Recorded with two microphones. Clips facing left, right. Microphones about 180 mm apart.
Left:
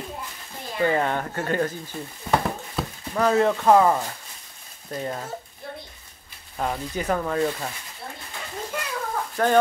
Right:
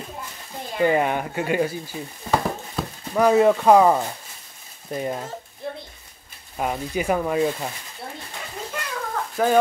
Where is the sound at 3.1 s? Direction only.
15° right (ahead or behind).